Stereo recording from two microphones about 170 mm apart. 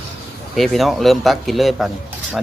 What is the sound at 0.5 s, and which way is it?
Speech, centre (ahead or behind).